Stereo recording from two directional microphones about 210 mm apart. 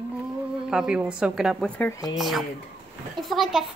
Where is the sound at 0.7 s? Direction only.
5° right (ahead or behind).